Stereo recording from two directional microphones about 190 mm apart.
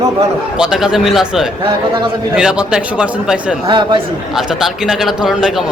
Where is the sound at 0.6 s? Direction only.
5° right (ahead or behind).